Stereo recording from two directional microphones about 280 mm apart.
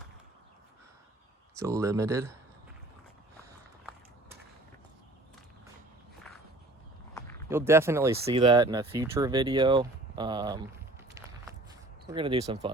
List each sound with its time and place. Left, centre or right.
1.5 s speech: centre
7.1 s walk: centre
7.5 s speech: centre
12.1 s speech: centre